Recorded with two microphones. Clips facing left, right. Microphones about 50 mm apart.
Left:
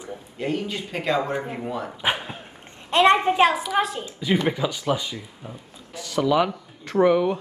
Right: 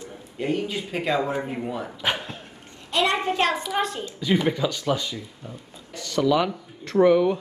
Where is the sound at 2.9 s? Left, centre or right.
Left.